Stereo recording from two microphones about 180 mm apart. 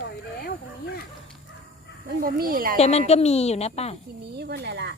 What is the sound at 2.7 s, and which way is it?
A woman's voice, 35° left (ahead or behind).